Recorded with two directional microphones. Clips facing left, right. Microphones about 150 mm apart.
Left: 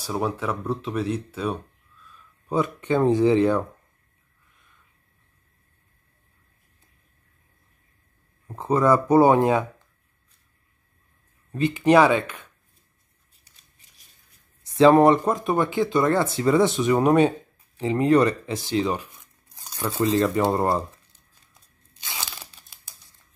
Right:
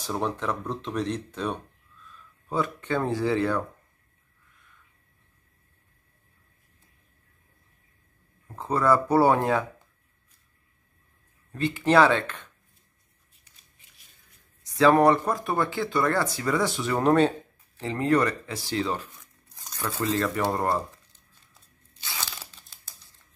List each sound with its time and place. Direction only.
0.0 s speech: 5° left (ahead or behind)
2.5 s speech: 20° left (ahead or behind)
8.5 s speech: 20° left (ahead or behind)
11.5 s speech: 15° left (ahead or behind)
14.7 s speech: 25° left (ahead or behind)